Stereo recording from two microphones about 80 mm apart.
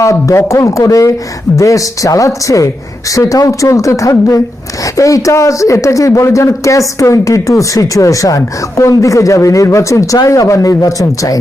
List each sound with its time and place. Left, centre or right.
0.0 s speech: left